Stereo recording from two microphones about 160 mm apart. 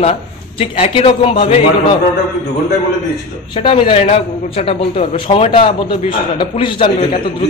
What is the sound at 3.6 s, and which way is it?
A man's voice, 30° left (ahead or behind).